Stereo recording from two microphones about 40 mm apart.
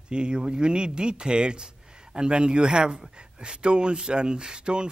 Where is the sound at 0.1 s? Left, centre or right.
Right.